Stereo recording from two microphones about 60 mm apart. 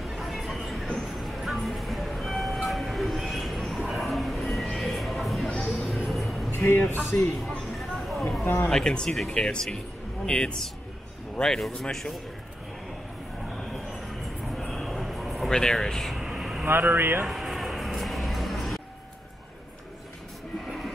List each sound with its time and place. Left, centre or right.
0.0 s a sound: centre
5.8 s music: centre
7.1 s speech: left
7.7 s a sound: centre
8.6 s speech: centre
13.6 s a sound: centre
15.5 s speech: centre
16.2 s vehicle: centre
16.6 s speech: right
17.3 s music: centre